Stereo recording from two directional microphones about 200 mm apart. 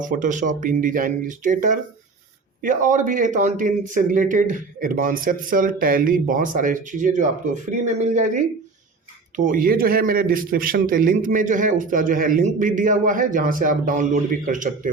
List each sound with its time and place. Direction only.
0.0 s a man's voice: 40° right (ahead or behind)